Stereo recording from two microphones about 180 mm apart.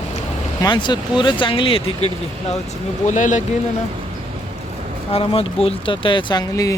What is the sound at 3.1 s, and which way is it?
Speech, 45° left (ahead or behind).